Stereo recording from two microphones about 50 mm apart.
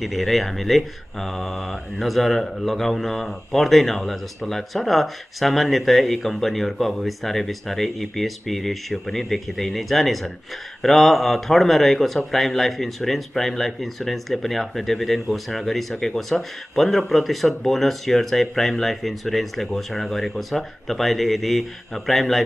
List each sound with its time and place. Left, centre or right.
0.0 s speech: centre